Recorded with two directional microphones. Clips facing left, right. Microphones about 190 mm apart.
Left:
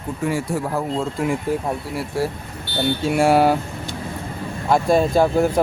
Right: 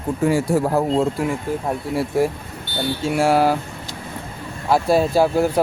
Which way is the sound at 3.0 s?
Centre (ahead or behind).